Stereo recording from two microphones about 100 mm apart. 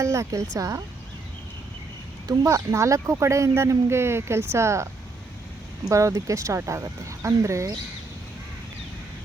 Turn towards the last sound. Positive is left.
turn(degrees=-30)  # may be behind; listen again after turning